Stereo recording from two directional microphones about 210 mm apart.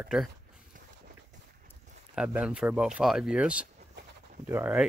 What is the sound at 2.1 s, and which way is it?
Speech, 5° right (ahead or behind).